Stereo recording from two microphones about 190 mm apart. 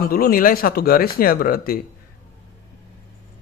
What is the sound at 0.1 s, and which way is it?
Speech, 50° left (ahead or behind).